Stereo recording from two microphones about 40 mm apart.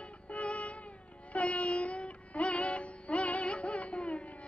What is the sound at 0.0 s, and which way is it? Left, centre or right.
Music, left.